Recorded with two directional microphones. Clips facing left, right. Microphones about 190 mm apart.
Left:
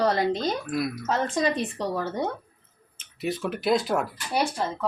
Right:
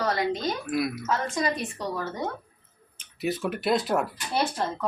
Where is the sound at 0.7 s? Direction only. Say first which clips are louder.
Right 1 dB; centre (ahead or behind).